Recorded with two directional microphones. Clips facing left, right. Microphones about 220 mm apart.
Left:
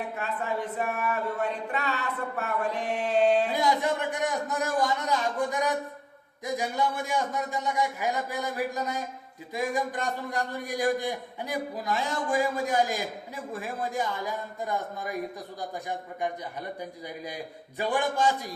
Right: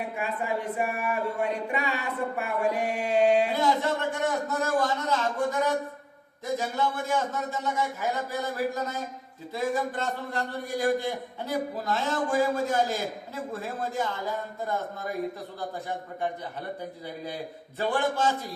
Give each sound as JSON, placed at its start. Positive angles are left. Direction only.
{"t": 0.2, "sound": "speech", "side_deg": -10}
{"t": 3.5, "sound": "a man's voice", "side_deg": 15}
{"t": 17.2, "sound": "a man's voice", "side_deg": 15}